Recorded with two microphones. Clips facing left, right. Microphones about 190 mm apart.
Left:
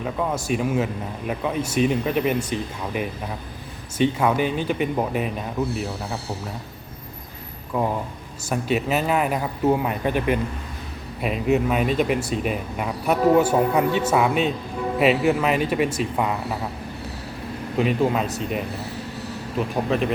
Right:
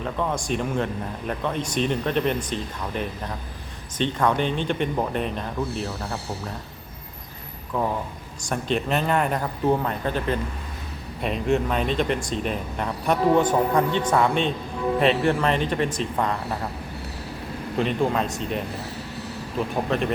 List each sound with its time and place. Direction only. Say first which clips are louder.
0.0 s speech: left 1 dB; 5° left (ahead or behind)
7.7 s speech: left 2 dB; 10° left (ahead or behind)
17.7 s speech: left 2 dB; 5° left (ahead or behind)